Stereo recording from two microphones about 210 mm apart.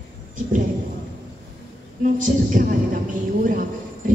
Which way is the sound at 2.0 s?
40° right (ahead or behind).